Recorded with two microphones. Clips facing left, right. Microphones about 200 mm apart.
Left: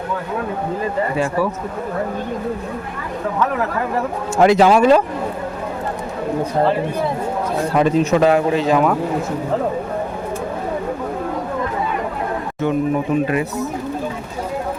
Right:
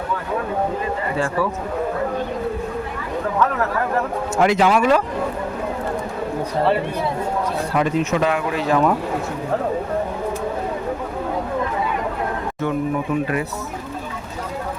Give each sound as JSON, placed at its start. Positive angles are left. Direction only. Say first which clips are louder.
{"t": 1.1, "sound": "a man's voice", "louder": "even", "side_deg": 15}
{"t": 4.4, "sound": "speech", "louder": "left 5 dB", "side_deg": 35}
{"t": 7.8, "sound": "speech", "louder": "left 5 dB", "side_deg": 30}
{"t": 12.6, "sound": "speech", "louder": "left 4 dB", "side_deg": 20}